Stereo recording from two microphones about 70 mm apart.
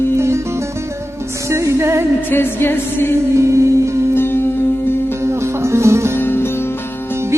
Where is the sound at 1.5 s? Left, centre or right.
Right.